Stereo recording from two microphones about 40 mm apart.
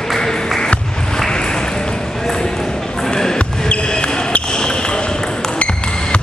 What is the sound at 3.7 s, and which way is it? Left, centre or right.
Basketball bounce, left.